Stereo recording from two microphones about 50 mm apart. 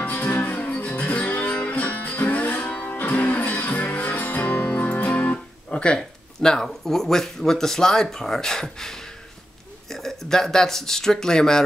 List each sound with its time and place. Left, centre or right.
0.0 s music: left; by 9.0 s centre
9.8 s speech: centre